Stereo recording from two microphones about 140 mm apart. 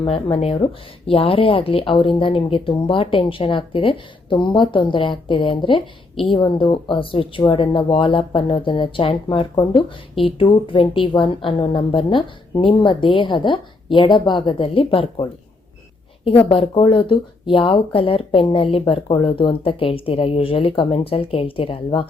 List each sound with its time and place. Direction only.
0.0 s a woman's voice: 40° left (ahead or behind)
16.5 s a woman's voice: 40° left (ahead or behind)